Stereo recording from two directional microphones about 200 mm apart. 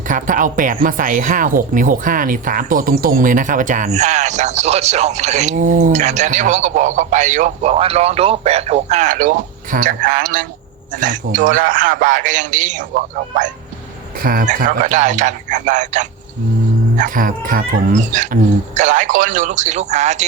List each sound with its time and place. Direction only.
0.1 s speech: 40° right (ahead or behind)